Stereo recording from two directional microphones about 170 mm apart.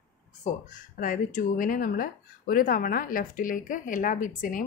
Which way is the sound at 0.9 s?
50° left (ahead or behind).